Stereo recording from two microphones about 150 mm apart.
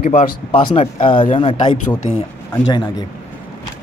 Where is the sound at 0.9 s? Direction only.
35° left (ahead or behind).